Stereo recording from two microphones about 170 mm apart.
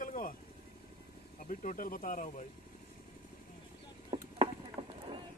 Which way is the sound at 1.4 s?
55° left (ahead or behind).